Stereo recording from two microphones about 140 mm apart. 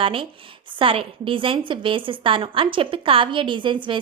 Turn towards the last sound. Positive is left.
turn(degrees=-35)  # may be behind; listen again after turning